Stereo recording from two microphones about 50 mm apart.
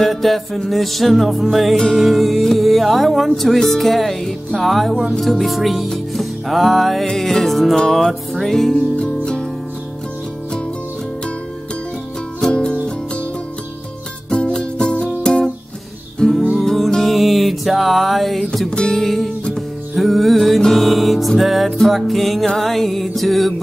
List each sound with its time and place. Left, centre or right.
0.0 s music: centre
8.9 s music: centre
12.4 s music: centre
14.3 s music: centre
18.7 s music: centre